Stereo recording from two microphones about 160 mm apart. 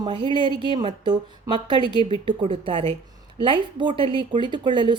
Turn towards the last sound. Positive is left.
turn(degrees=-30)  # may be behind; listen again after turning